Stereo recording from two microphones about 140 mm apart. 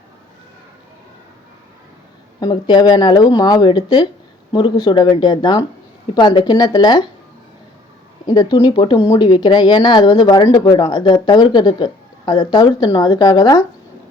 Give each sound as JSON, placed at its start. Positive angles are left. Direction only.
{"t": 2.4, "sound": "speech", "side_deg": 30}
{"t": 8.3, "sound": "speech", "side_deg": 30}